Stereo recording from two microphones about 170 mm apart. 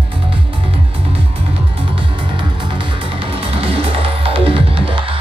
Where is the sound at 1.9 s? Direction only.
30° right (ahead or behind).